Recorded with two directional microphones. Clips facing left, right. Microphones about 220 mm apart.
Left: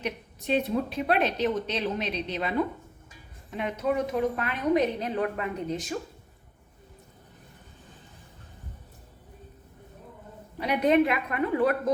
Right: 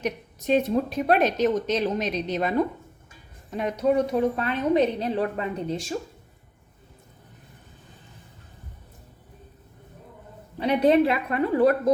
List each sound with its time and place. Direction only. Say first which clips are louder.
0.0 s a woman's voice: right 4 dB; 45° right (ahead or behind)
10.6 s a woman's voice: right 3 dB; 30° right (ahead or behind)